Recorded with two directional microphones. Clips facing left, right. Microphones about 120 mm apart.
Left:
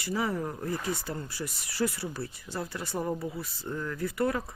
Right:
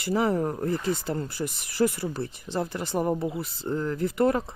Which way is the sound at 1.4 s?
20° right (ahead or behind).